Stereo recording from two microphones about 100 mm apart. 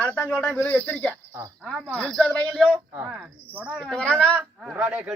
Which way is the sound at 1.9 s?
5° left (ahead or behind).